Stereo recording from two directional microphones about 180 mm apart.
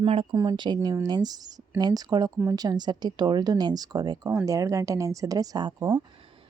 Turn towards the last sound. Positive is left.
turn(degrees=-25)  # may be behind; listen again after turning